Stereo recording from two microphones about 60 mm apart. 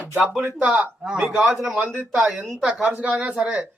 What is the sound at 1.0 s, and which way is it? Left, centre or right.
Speech, centre.